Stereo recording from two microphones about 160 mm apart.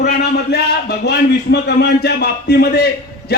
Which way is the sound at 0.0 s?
90° left.